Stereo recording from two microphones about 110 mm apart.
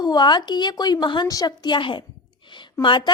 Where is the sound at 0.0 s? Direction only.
40° left (ahead or behind).